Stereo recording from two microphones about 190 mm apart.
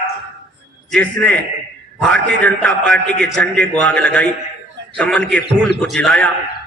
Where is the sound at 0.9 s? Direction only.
5° left (ahead or behind).